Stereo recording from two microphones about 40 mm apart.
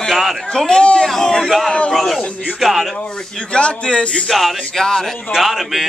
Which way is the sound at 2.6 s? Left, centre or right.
Centre.